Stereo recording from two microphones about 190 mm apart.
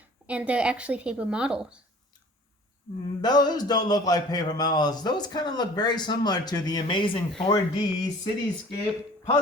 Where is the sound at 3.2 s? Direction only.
20° left (ahead or behind).